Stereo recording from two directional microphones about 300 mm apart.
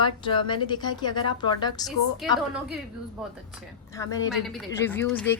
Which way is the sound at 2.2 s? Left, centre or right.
Centre.